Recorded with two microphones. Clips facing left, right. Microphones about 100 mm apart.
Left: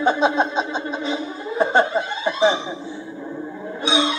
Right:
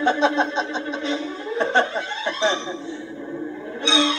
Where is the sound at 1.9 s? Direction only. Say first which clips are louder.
Left 4 dB; 40° left (ahead or behind).